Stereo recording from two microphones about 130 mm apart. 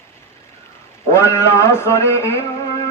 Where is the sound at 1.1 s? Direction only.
20° left (ahead or behind).